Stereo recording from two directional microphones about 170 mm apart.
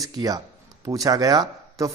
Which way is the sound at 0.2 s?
20° right (ahead or behind).